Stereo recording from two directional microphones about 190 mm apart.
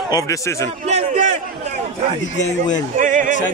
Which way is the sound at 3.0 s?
45° right (ahead or behind).